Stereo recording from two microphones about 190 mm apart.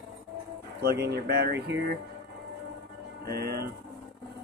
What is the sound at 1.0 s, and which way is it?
Speech, 60° right (ahead or behind).